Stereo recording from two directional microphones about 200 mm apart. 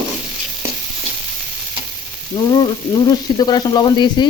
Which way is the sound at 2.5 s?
20° left (ahead or behind).